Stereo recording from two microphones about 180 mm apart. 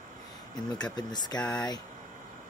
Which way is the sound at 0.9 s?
25° left (ahead or behind).